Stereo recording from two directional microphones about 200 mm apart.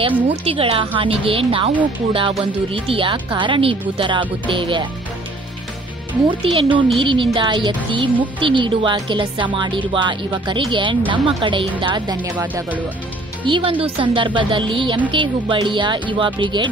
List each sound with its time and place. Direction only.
0.5 s speech: 30° right (ahead or behind)
6.4 s speech: 25° right (ahead or behind)
12.4 s speech: 10° right (ahead or behind)
13.4 s speech: 25° right (ahead or behind)